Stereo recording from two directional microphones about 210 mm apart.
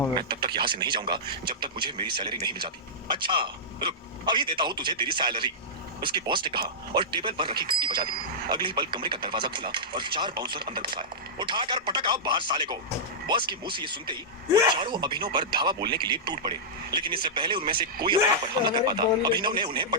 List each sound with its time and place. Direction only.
0.2 s speech: 25° right (ahead or behind)